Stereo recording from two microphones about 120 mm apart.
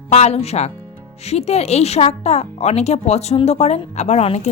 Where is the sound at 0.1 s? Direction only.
60° left (ahead or behind).